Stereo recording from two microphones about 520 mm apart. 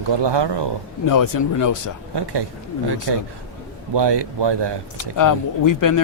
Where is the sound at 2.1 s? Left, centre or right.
Right.